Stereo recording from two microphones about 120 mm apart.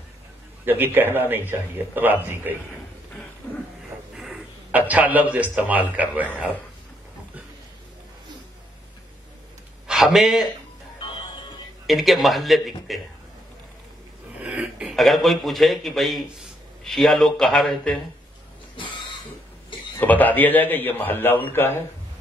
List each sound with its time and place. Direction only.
0.7 s a man's voice: 15° right (ahead or behind)
4.1 s a sound: centre (ahead or behind)
4.6 s a man's voice: 15° right (ahead or behind)
9.8 s a man's voice: centre (ahead or behind)
11.8 s a man's voice: centre (ahead or behind)
14.4 s a man's voice: 10° right (ahead or behind)
20.0 s a man's voice: 15° left (ahead or behind)